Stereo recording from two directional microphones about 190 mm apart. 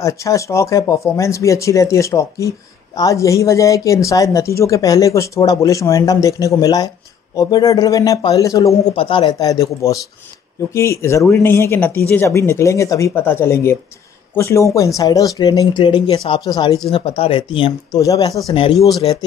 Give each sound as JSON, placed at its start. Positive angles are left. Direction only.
{"t": 0.0, "sound": "speech", "side_deg": 15}
{"t": 8.9, "sound": "speech", "side_deg": 30}
{"t": 18.5, "sound": "speech", "side_deg": 30}